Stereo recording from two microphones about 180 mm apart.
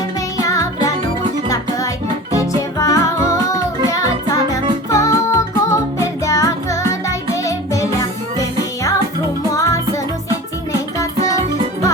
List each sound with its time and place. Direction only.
0.3 s music: 20° left (ahead or behind)
2.7 s music: 15° left (ahead or behind)
9.5 s music: 15° left (ahead or behind)